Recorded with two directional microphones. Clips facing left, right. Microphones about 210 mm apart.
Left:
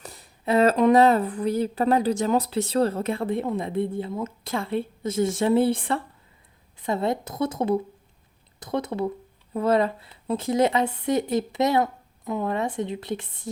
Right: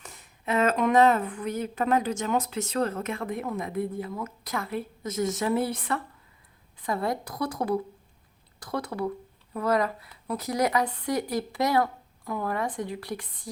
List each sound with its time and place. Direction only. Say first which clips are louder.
0.0 s speech: left 5 dB; 35° left (ahead or behind)